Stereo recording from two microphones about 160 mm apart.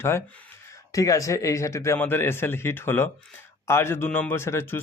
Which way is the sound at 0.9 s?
20° left (ahead or behind).